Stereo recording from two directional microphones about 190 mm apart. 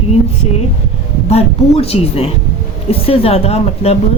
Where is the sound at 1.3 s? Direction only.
30° left (ahead or behind).